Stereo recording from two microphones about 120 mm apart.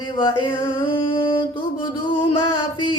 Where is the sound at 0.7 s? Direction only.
45° left (ahead or behind).